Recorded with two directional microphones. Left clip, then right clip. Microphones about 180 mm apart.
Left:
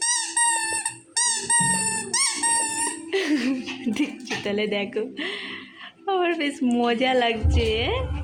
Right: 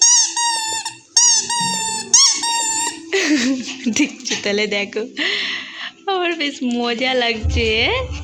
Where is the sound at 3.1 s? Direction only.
15° right (ahead or behind).